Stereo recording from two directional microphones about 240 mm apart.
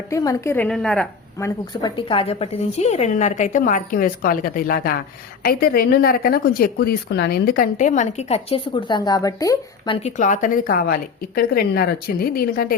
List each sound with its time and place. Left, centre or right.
0.1 s a woman's voice: centre; by 12.7 s left